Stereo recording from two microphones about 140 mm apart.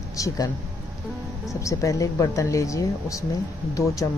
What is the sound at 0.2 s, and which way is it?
Speech, 25° left (ahead or behind).